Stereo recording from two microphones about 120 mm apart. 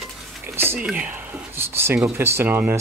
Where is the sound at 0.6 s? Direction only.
20° right (ahead or behind).